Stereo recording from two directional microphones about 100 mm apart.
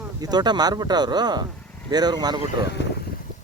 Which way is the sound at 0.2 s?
45° right (ahead or behind).